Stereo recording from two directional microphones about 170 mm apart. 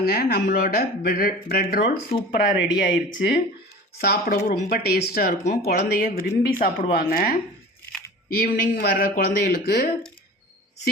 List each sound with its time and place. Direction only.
0.0 s speech: 65° left (ahead or behind)
3.9 s speech: 70° left (ahead or behind)